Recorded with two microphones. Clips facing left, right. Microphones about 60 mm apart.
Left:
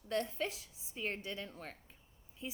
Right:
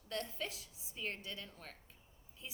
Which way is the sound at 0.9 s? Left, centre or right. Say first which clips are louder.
Left 4 dB; left.